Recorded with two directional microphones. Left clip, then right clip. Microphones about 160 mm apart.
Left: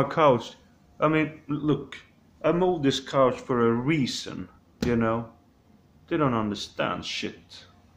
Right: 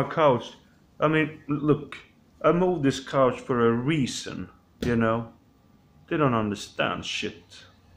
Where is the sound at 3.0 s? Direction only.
5° right (ahead or behind).